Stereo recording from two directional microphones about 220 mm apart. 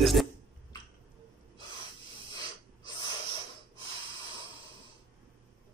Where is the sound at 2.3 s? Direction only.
20° left (ahead or behind).